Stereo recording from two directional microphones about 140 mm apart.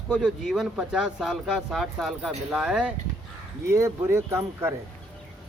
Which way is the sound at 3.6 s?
20° right (ahead or behind).